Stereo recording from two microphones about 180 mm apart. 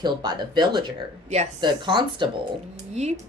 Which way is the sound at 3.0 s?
40° right (ahead or behind).